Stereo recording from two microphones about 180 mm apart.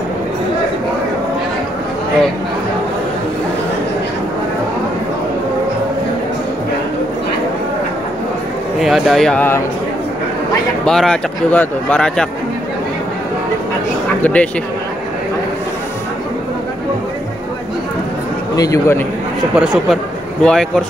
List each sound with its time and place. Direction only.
8.7 s speech: centre (ahead or behind)
10.9 s speech: 5° left (ahead or behind)
14.2 s a man's voice: 5° left (ahead or behind)
18.6 s a man's voice: 15° left (ahead or behind)
19.5 s speech: 5° right (ahead or behind)